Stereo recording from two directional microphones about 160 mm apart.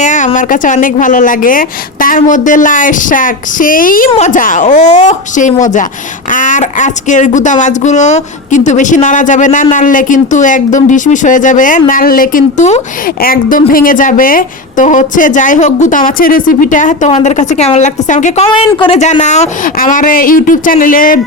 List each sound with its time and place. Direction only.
0.0 s a sound: 50° left (ahead or behind)
0.3 s a woman's voice: 55° left (ahead or behind)
13.2 s a woman's voice: 65° left (ahead or behind)
18.5 s a woman's voice: 35° left (ahead or behind); by 21.2 s 60° left (ahead or behind)